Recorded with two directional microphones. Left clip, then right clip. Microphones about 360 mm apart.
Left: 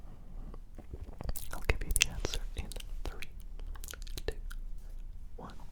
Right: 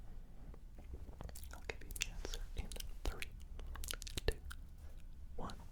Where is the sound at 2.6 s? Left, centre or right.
Centre.